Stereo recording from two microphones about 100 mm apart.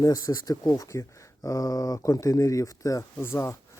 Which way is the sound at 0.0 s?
35° left (ahead or behind).